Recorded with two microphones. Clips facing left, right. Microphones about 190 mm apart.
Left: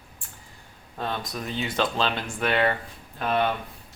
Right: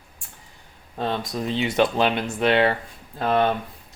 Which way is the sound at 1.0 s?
25° right (ahead or behind).